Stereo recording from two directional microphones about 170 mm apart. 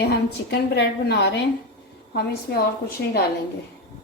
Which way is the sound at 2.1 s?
65° left (ahead or behind).